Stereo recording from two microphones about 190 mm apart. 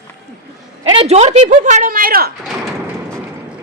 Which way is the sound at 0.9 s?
30° right (ahead or behind).